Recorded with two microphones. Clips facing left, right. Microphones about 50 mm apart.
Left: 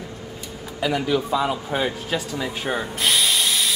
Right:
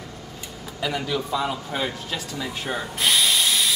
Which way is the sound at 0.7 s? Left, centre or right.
Centre.